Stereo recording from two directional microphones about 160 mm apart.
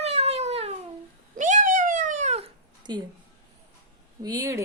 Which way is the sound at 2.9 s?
25° right (ahead or behind).